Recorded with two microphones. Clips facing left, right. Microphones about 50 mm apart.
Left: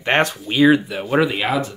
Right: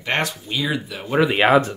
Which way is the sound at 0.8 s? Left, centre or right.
Centre.